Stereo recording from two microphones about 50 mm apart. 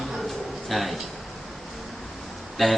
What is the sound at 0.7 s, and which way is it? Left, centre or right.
Speech, centre.